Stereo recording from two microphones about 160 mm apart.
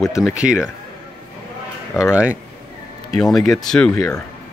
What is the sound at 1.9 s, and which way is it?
Speech, 20° left (ahead or behind).